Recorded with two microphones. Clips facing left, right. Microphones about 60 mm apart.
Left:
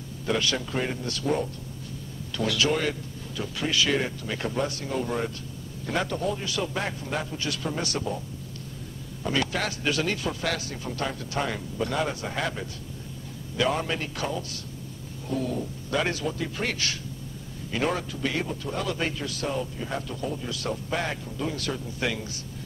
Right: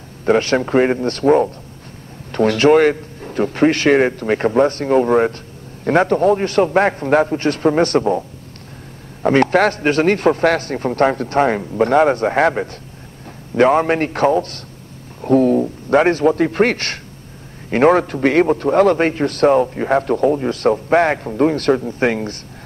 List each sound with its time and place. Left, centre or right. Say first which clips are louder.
0.2 s a man's voice: right 12 dB; right
9.2 s a man's voice: right 14 dB; right